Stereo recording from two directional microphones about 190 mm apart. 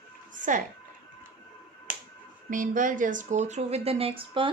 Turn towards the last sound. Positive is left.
turn(degrees=-25)  # may be behind; listen again after turning